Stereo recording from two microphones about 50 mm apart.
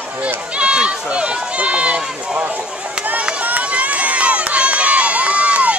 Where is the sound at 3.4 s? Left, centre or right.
Right.